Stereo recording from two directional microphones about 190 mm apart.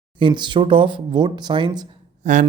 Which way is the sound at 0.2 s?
25° right (ahead or behind).